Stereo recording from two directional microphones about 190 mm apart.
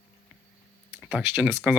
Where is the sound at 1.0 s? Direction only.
5° right (ahead or behind).